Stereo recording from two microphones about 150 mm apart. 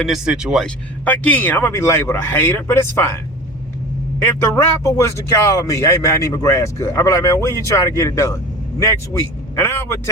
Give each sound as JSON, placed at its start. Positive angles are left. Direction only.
{"t": 0.0, "sound": "speech", "side_deg": -5}
{"t": 1.0, "sound": "speech", "side_deg": 10}
{"t": 4.4, "sound": "speech", "side_deg": 20}